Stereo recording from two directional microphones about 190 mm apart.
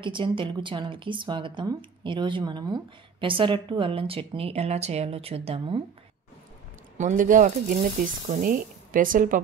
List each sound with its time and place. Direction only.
0.0 s speech: 25° right (ahead or behind)
7.0 s speech: 40° right (ahead or behind)